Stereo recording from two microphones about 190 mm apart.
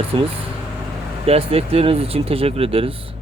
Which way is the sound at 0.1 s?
25° right (ahead or behind).